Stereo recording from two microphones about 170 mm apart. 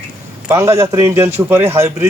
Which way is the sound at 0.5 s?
15° right (ahead or behind).